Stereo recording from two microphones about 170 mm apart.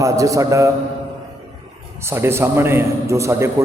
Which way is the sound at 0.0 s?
20° right (ahead or behind).